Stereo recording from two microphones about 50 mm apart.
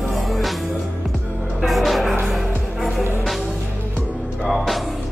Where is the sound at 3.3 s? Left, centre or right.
Centre.